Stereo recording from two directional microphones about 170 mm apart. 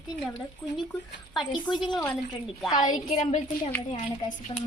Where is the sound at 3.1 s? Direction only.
45° left (ahead or behind).